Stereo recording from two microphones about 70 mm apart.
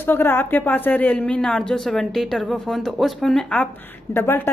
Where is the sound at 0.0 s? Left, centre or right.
Left.